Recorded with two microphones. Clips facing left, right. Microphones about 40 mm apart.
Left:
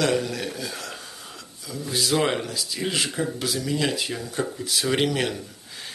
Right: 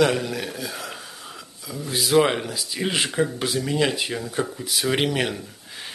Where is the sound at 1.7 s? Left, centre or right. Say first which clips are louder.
Right 3 dB; centre.